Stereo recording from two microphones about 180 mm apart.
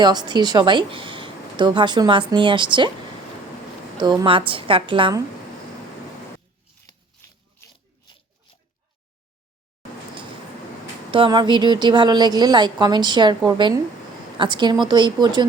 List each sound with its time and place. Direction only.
0.0 s speech: 25° right (ahead or behind)
3.9 s speech: 25° right (ahead or behind)
6.8 s a sound: 15° left (ahead or behind)
11.1 s speech: 25° right (ahead or behind)